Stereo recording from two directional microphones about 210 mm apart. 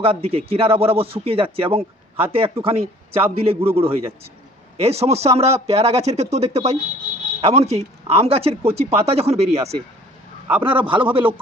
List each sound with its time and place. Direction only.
0.0 s a man's voice: 25° right (ahead or behind)